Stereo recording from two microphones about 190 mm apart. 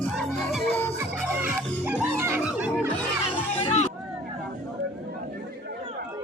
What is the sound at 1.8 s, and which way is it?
Music, 15° right (ahead or behind).